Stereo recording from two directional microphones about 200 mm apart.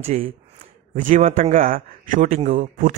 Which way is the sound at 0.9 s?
40° right (ahead or behind).